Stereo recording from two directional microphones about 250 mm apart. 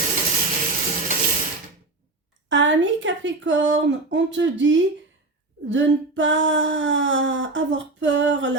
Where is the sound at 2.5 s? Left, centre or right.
Right.